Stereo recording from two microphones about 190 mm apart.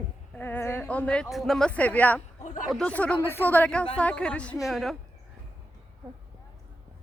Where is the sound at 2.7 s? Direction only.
5° left (ahead or behind).